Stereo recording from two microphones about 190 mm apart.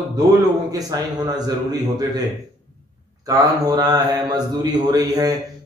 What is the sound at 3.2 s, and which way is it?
A man's voice, 20° right (ahead or behind).